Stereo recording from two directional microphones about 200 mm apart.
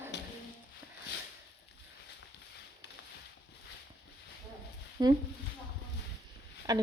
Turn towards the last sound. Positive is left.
turn(degrees=-15)  # may be behind; listen again after turning